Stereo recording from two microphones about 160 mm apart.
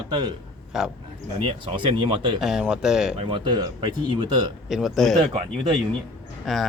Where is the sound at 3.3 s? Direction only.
30° right (ahead or behind).